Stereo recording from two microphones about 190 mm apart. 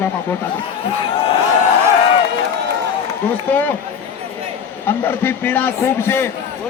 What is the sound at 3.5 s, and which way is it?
Speech, 10° left (ahead or behind).